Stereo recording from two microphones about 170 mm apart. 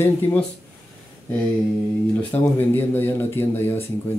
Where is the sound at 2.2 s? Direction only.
10° left (ahead or behind).